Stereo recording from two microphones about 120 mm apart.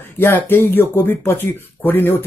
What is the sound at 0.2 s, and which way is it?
Speech, 20° left (ahead or behind).